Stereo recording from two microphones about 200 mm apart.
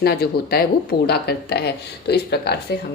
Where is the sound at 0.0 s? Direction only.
50° left (ahead or behind).